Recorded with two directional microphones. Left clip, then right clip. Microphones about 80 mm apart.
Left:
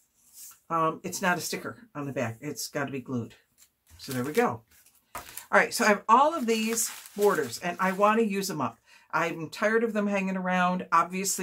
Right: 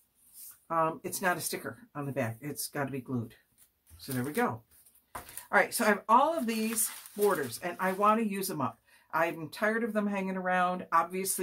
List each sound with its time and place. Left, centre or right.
0.7 s speech: centre
5.5 s speech: left